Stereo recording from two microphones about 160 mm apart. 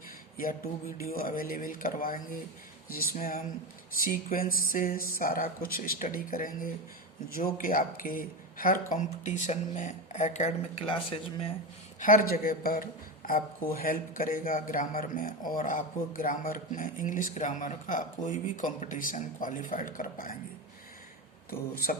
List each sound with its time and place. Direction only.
0.3 s a man's voice: 65° left (ahead or behind); by 11.5 s 35° left (ahead or behind)
11.9 s a man's voice: 55° left (ahead or behind)
21.5 s a man's voice: 65° left (ahead or behind)